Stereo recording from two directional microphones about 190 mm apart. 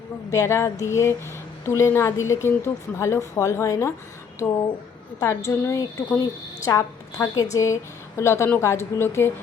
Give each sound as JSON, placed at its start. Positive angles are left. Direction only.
{"t": 0.3, "sound": "speech", "side_deg": 15}
{"t": 5.2, "sound": "speech", "side_deg": 15}